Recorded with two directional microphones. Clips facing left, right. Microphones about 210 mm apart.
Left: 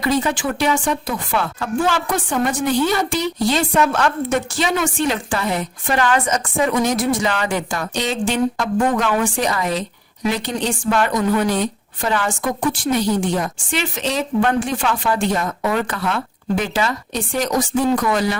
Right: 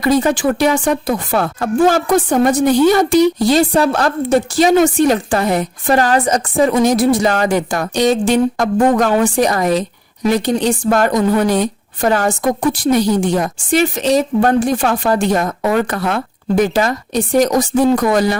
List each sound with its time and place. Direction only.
0.0 s speech: 40° right (ahead or behind)